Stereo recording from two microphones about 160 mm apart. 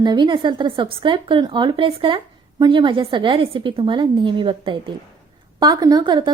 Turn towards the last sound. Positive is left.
turn(degrees=-30)  # may be behind; listen again after turning